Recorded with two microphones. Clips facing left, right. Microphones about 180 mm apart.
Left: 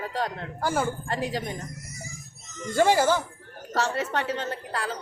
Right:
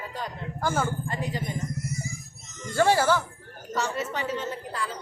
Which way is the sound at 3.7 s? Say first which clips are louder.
Left 2 dB; 75° left (ahead or behind).